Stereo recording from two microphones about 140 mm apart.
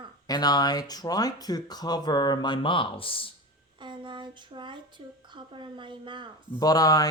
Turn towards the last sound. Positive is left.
turn(degrees=25)  # may be behind; listen again after turning